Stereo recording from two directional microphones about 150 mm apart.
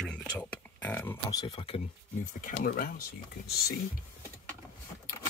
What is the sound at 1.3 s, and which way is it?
Speech, 30° left (ahead or behind).